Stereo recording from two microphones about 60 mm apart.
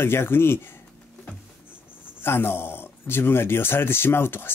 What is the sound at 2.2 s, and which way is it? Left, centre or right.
Speech, left.